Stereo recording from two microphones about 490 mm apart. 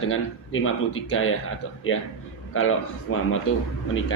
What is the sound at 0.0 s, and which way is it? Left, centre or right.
Speech, left.